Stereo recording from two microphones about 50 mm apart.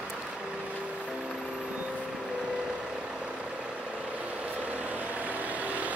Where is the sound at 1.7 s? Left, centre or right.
Right.